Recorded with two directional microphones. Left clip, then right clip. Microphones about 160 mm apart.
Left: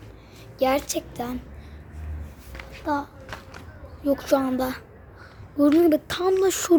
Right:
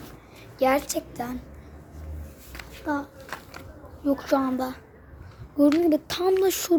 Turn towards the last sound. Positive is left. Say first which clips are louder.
# left 1 dB
turn(degrees=10)  # may be behind; listen again after turning